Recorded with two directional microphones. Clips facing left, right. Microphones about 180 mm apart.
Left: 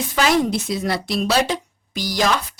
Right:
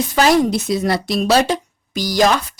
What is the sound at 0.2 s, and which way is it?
Speech, 40° right (ahead or behind).